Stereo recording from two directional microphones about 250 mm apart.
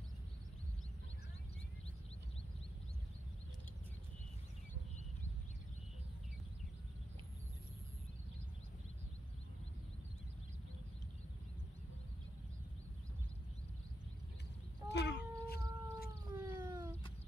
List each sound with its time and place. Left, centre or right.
14.9 s cat: left
16.3 s cat: centre